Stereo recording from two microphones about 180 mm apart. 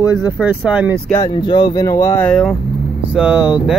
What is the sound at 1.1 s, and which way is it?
Speech, 25° left (ahead or behind).